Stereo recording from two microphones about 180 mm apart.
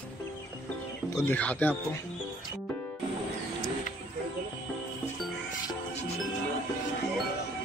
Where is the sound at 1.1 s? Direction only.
10° left (ahead or behind).